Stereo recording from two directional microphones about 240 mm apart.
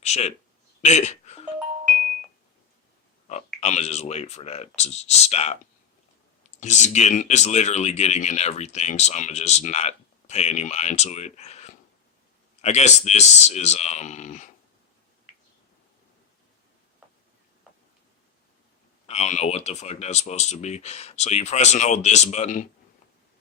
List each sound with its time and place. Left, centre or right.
0.0 s speech: left
0.8 s a sound: left
3.2 s speech: left
6.6 s speech: left
19.0 s speech: left